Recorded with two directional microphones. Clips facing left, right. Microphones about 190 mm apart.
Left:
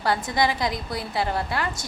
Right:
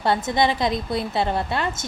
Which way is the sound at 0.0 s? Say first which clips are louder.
Right 3 dB; 25° right (ahead or behind).